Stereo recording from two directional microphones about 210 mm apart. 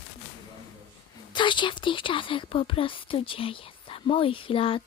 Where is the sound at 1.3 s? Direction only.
20° left (ahead or behind).